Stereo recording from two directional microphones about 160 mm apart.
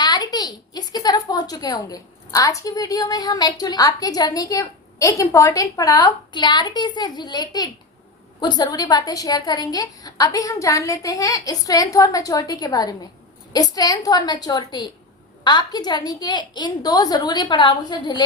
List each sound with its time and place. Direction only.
0.0 s speech: 25° left (ahead or behind)